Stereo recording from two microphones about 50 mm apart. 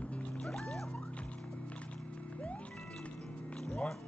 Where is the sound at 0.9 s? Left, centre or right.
Left.